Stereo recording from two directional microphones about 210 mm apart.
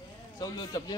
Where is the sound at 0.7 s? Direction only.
15° left (ahead or behind).